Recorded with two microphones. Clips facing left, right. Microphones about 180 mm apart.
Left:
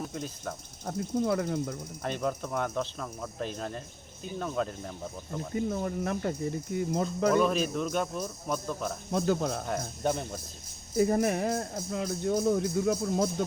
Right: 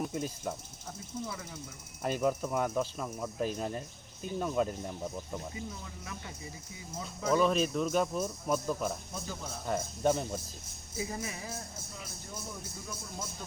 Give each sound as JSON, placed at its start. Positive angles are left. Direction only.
{"t": 0.0, "sound": "speech", "side_deg": -10}
{"t": 0.9, "sound": "speech", "side_deg": 60}
{"t": 2.0, "sound": "speech", "side_deg": -5}
{"t": 5.5, "sound": "speech", "side_deg": 55}
{"t": 7.3, "sound": "speech", "side_deg": 0}
{"t": 9.1, "sound": "a man's voice", "side_deg": 70}
{"t": 9.6, "sound": "speech", "side_deg": -5}
{"t": 10.9, "sound": "a man's voice", "side_deg": 60}